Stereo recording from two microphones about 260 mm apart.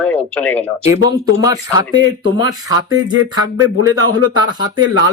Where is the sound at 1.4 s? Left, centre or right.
Centre.